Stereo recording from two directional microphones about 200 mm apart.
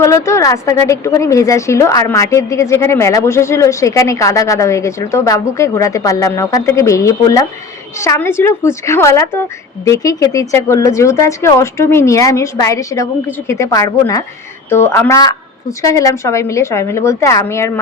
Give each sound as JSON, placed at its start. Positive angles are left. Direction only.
{"t": 0.0, "sound": "a woman's voice", "side_deg": 15}